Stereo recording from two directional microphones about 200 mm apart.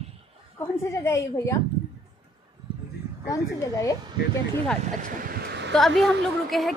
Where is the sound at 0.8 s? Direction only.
15° left (ahead or behind).